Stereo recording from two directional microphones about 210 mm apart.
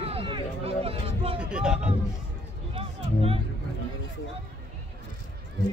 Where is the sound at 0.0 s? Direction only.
25° right (ahead or behind).